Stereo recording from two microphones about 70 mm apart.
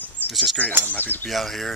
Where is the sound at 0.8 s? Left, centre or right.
Left.